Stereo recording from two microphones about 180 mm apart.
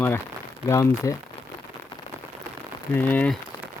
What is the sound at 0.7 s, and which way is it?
Speech, 15° left (ahead or behind).